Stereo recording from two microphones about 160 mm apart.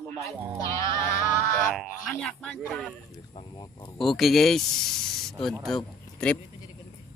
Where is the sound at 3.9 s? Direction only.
Centre (ahead or behind).